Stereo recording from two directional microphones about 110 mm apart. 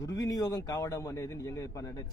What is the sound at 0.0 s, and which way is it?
A man's voice, 35° left (ahead or behind).